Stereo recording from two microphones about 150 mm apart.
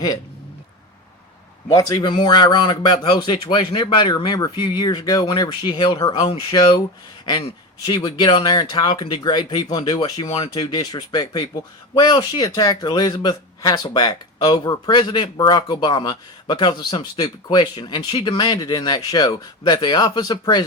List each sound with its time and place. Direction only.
1.7 s a man's voice: 25° left (ahead or behind)